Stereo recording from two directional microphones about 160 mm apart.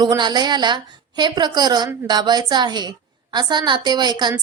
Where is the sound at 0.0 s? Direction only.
25° right (ahead or behind).